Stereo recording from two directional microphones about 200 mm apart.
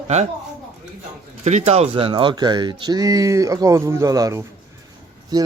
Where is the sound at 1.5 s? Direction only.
35° right (ahead or behind).